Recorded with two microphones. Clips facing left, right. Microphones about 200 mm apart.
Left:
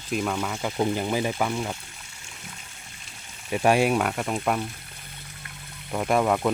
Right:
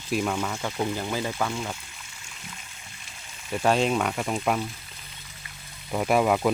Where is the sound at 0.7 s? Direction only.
15° left (ahead or behind).